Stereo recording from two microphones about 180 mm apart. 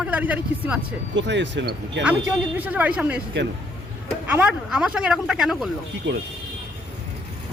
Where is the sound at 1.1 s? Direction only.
85° right.